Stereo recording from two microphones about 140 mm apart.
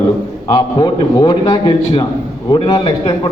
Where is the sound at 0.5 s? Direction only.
30° left (ahead or behind).